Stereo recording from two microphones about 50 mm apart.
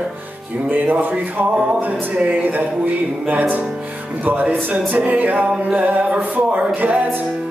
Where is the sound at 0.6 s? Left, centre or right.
Right.